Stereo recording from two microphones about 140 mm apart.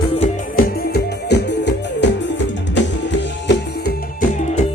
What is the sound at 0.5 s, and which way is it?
Music, 90° left.